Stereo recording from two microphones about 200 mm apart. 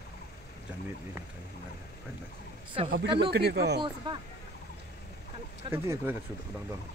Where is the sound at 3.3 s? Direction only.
55° right (ahead or behind).